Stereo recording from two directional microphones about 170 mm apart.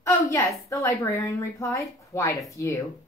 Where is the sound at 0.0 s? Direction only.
15° left (ahead or behind).